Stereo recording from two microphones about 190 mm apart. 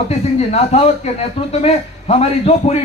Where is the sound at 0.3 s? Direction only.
35° left (ahead or behind).